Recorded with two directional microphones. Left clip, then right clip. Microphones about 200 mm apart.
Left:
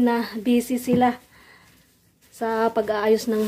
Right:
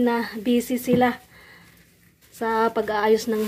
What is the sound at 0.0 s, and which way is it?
Speech, 10° left (ahead or behind).